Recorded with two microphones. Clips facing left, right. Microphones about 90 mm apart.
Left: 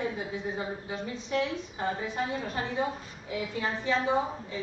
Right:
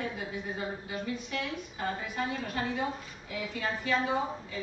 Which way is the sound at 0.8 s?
25° left (ahead or behind).